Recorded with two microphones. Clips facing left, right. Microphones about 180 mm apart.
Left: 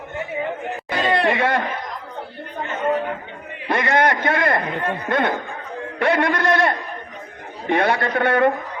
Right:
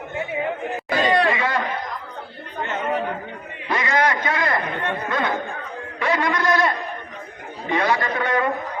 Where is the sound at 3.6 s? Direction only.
55° left (ahead or behind).